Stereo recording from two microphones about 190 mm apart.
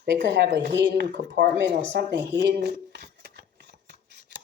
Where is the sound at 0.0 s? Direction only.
70° right (ahead or behind).